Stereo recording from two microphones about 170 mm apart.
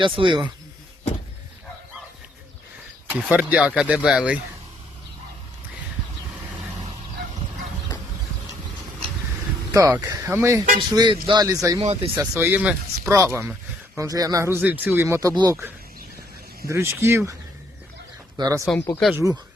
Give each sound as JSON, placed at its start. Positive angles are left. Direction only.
{"t": 0.0, "sound": "a man's voice", "side_deg": -30}
{"t": 3.1, "sound": "speech", "side_deg": -10}
{"t": 9.7, "sound": "speech", "side_deg": -20}
{"t": 10.8, "sound": "a man's voice", "side_deg": -30}
{"t": 11.8, "sound": "speech", "side_deg": -35}
{"t": 12.2, "sound": "speech", "side_deg": -15}
{"t": 16.6, "sound": "speech", "side_deg": -15}
{"t": 18.3, "sound": "a man's voice", "side_deg": -20}
{"t": 18.6, "sound": "speech", "side_deg": 5}
{"t": 19.1, "sound": "speech", "side_deg": -10}